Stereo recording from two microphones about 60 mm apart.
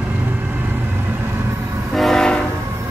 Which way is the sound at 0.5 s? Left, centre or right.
Right.